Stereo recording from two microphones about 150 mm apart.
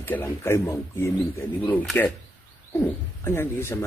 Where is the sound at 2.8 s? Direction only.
15° left (ahead or behind).